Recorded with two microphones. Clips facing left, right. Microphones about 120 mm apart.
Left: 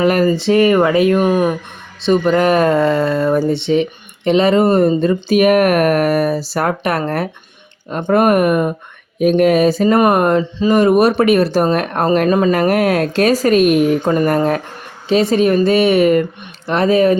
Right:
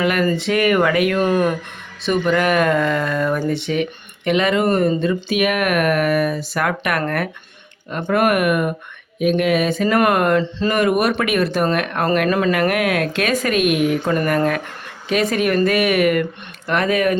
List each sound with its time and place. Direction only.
0.0 s speech: 40° left (ahead or behind)
1.2 s speech: 10° left (ahead or behind)
2.0 s speech: 30° left (ahead or behind)
8.2 s speech: 30° left (ahead or behind)
10.0 s speech: 20° left (ahead or behind)
10.8 s speech: 30° left (ahead or behind)
14.0 s speech: 20° left (ahead or behind)
14.3 s speech: 30° left (ahead or behind)